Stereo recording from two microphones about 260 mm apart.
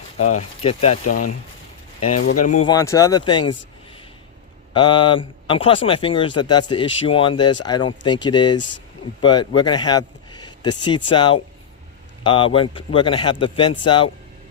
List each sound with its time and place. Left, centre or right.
0.3 s speech: left
2.0 s speech: left
2.4 s speech: left
2.6 s speech: centre
4.7 s speech: centre